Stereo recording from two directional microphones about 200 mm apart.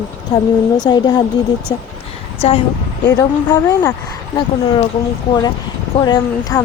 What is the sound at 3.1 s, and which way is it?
Speech, 20° left (ahead or behind).